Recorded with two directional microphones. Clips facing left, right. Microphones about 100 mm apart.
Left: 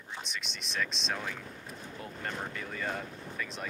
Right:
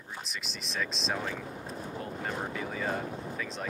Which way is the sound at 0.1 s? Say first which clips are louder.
Even; centre (ahead or behind).